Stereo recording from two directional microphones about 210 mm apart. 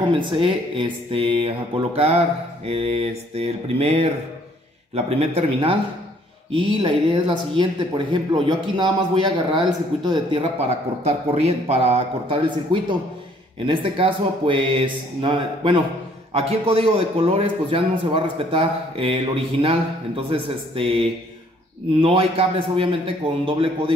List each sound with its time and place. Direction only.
0.1 s a man's voice: 25° right (ahead or behind)
13.7 s a man's voice: 25° right (ahead or behind)